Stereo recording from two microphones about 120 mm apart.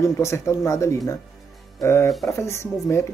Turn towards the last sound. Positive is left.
turn(degrees=25)  # may be behind; listen again after turning